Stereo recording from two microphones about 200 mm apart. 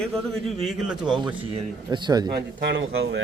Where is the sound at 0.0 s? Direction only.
5° left (ahead or behind).